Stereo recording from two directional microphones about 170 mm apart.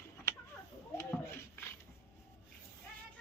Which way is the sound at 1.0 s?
15° left (ahead or behind).